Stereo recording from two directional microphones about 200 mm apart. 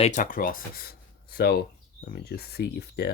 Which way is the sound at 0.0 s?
40° left (ahead or behind).